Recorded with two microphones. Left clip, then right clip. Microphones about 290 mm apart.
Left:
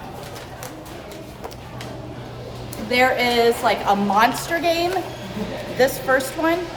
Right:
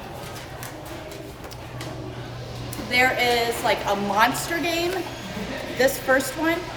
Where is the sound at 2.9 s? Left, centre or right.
Centre.